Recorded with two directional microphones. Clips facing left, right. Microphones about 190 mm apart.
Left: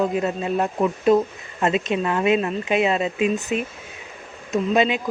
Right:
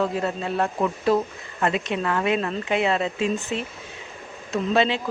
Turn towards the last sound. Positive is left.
turn(degrees=15)  # may be behind; listen again after turning